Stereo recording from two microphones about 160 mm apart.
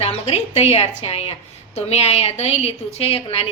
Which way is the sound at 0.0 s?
40° left (ahead or behind).